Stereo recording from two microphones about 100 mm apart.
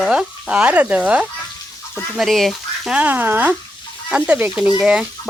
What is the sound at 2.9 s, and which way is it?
Speech, 20° right (ahead or behind).